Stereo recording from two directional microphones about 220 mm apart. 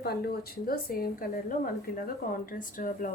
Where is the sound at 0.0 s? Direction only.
45° left (ahead or behind).